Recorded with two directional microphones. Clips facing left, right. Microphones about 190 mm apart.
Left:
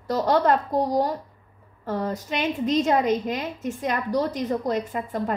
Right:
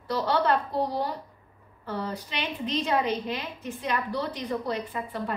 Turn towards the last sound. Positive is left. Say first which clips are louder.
# left 5 dB
turn(degrees=45)  # may be behind; listen again after turning